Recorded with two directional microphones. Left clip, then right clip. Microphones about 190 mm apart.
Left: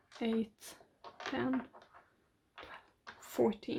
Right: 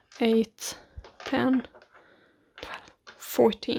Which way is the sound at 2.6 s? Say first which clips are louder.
Right 13 dB; 45° right (ahead or behind).